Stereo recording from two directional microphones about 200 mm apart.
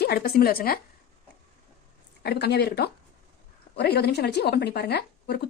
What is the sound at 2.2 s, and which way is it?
Speech, 55° left (ahead or behind).